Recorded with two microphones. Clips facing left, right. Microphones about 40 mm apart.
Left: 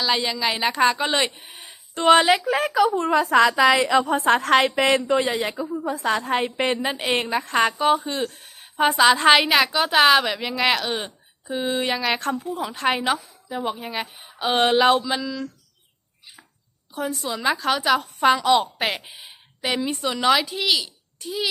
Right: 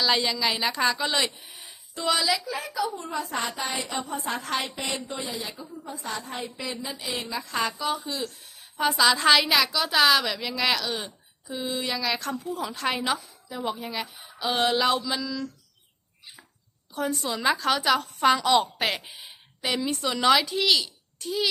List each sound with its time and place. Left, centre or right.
0.0 s speech: centre; by 1.7 s left
2.0 s a woman's voice: left
16.9 s a woman's voice: centre